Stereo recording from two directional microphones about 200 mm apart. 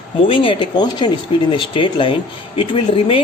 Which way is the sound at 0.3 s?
25° left (ahead or behind).